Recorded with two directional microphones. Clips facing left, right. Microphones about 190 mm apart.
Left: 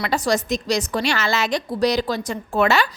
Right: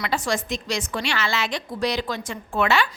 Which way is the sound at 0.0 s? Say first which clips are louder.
Left 4 dB; 40° left (ahead or behind).